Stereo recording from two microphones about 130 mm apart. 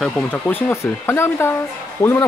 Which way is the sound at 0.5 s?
15° left (ahead or behind).